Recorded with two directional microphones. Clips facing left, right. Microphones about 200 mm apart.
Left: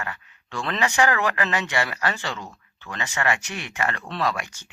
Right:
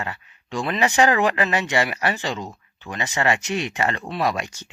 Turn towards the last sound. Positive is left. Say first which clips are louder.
# right 3 dB
turn(degrees=-15)  # may be behind; listen again after turning